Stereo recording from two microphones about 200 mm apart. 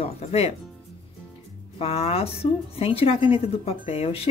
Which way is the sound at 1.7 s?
30° left (ahead or behind).